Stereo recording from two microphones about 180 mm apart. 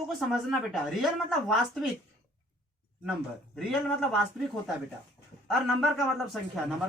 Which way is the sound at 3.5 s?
Centre (ahead or behind).